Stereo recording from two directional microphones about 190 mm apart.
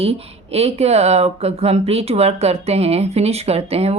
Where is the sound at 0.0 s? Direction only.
30° right (ahead or behind).